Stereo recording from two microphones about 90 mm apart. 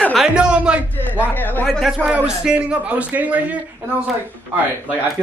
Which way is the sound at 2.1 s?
15° right (ahead or behind).